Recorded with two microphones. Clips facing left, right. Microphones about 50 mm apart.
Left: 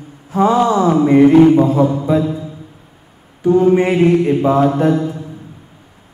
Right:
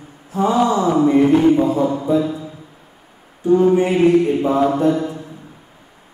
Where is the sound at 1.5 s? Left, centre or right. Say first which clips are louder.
Left 3 dB; left.